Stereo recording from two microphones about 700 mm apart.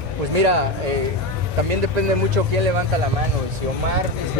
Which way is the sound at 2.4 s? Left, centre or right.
Right.